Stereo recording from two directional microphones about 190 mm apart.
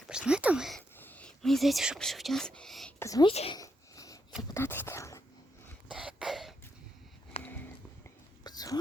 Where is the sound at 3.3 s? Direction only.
30° left (ahead or behind).